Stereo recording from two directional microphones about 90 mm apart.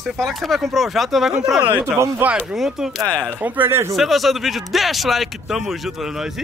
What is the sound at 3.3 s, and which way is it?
Speech, 20° right (ahead or behind).